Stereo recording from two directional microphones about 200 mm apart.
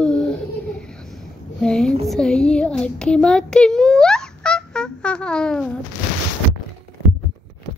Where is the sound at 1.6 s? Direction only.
5° left (ahead or behind).